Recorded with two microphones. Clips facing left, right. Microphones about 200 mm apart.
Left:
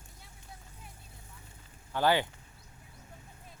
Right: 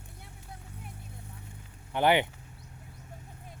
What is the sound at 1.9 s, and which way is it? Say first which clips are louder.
Speech: right 3 dB; 20° right (ahead or behind).